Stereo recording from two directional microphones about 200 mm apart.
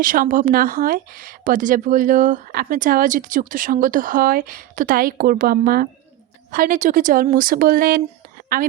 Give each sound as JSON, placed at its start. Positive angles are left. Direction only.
{"t": 0.0, "sound": "speech", "side_deg": -40}